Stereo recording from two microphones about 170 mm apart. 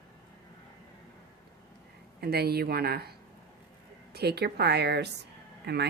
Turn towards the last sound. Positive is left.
turn(degrees=-80)